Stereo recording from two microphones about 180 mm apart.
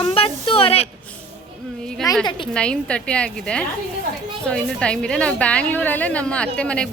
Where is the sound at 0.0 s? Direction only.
30° left (ahead or behind).